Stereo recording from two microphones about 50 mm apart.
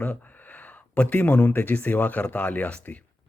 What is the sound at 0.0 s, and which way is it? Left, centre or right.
Speech, left.